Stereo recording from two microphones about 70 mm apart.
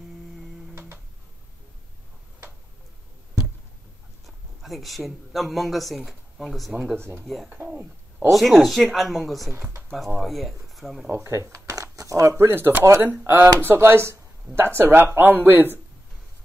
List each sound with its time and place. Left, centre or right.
0.7 s music: right
4.6 s speech: centre
7.5 s speech: right
8.3 s speech: centre
11.1 s speech: right
11.7 s crumpling: right
12.4 s speech: right